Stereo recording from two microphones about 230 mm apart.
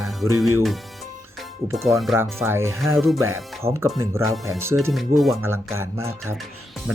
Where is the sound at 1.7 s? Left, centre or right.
Centre.